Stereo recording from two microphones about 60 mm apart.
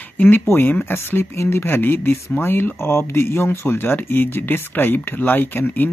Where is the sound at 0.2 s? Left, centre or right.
Left.